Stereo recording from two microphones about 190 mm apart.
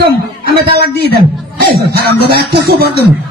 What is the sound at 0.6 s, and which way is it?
Speech, 55° right (ahead or behind).